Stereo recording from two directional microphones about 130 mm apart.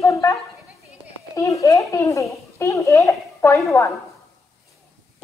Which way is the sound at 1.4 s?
25° left (ahead or behind).